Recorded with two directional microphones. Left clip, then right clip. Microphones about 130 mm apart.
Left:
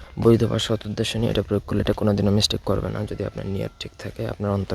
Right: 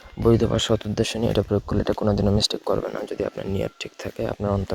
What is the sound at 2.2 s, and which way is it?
Speech, 15° left (ahead or behind).